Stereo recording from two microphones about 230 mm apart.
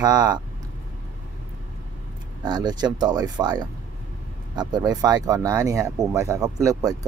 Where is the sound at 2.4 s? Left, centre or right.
Centre.